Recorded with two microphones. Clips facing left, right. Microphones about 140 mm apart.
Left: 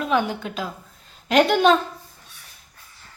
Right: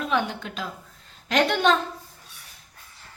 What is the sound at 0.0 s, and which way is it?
A child's voice, 5° left (ahead or behind).